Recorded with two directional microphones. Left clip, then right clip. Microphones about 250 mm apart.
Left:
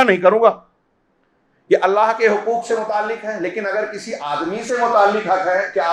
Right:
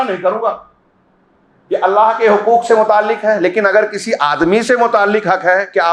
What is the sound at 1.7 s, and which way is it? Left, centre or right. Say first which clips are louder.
Speech: right 3 dB; left.